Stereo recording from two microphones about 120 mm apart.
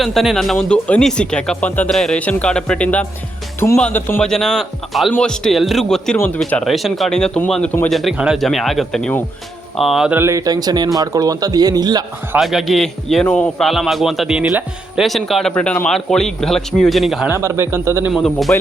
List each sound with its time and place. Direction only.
0.0 s speech: centre (ahead or behind); by 4.2 s 15° left (ahead or behind)
4.2 s a man's voice: 5° left (ahead or behind)
6.1 s speech: 15° left (ahead or behind)
6.7 s a man's voice: centre (ahead or behind)
10.2 s a man's voice: 25° right (ahead or behind)
12.4 s a man's voice: centre (ahead or behind)
17.2 s a man's voice: 25° right (ahead or behind)
18.1 s a man's voice: centre (ahead or behind)